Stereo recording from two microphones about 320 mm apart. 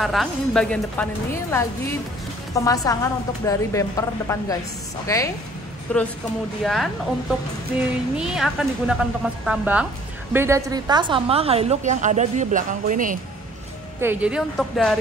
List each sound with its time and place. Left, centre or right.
0.0 s a woman's voice: centre; by 13.2 s right
14.0 s speech: centre